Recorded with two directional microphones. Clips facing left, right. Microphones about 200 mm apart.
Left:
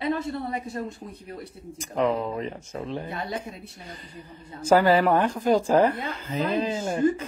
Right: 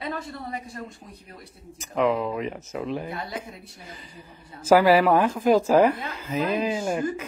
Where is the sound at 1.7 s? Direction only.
Centre (ahead or behind).